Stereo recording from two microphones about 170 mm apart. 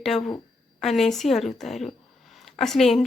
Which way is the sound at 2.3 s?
Centre (ahead or behind).